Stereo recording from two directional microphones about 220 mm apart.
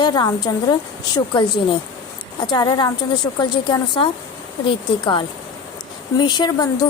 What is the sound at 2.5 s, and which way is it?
A woman's voice, 20° left (ahead or behind).